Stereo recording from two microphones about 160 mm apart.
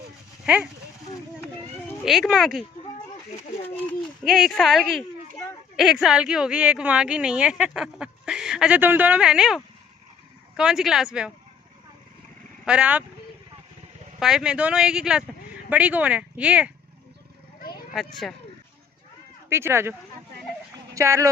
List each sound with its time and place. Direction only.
0.4 s speech: 5° right (ahead or behind)
2.0 s a woman's voice: centre (ahead or behind)
4.2 s a woman's voice: centre (ahead or behind)
10.6 s a woman's voice: 5° right (ahead or behind)
12.6 s speech: 5° right (ahead or behind)
14.2 s a woman's voice: 5° right (ahead or behind)
17.9 s a woman's voice: centre (ahead or behind)
19.5 s speech: 15° right (ahead or behind)